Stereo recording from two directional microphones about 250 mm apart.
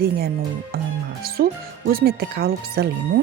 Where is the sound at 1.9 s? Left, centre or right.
Right.